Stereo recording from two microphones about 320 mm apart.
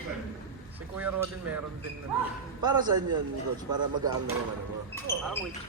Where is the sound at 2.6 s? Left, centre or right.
Centre.